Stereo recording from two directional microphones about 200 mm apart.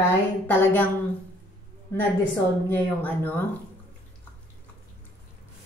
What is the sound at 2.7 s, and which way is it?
Speech, 10° left (ahead or behind).